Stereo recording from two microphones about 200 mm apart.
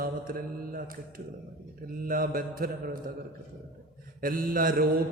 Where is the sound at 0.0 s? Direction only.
45° right (ahead or behind).